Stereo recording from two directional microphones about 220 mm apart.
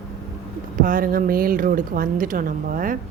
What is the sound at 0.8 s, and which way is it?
Speech, 40° right (ahead or behind).